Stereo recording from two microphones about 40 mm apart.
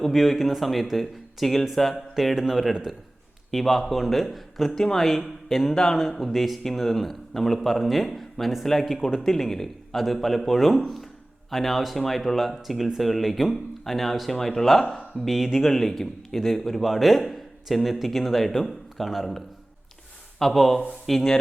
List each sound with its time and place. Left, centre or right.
0.0 s a man's voice: centre
4.7 s speech: centre
5.7 s a man's voice: centre
15.2 s a man's voice: centre
20.4 s a man's voice: centre